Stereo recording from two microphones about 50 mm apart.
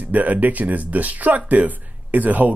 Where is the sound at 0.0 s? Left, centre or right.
Right.